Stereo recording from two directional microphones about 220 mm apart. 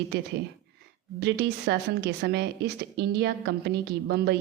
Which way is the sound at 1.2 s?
50° right (ahead or behind).